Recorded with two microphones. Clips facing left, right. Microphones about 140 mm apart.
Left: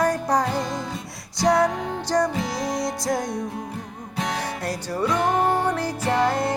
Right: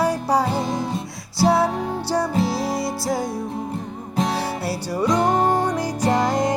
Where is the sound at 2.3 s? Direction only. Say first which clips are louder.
Right 4 dB; 30° right (ahead or behind).